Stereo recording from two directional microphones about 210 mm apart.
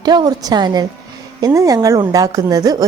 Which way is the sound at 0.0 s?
20° right (ahead or behind).